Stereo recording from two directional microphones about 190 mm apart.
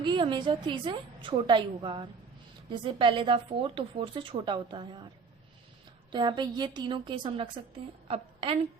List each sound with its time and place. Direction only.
0.0 s speech: 25° right (ahead or behind)
6.1 s speech: 25° right (ahead or behind)
8.0 s a sound: 30° right (ahead or behind)